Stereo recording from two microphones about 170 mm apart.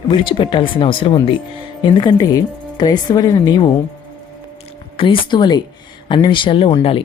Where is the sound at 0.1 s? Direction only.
30° left (ahead or behind).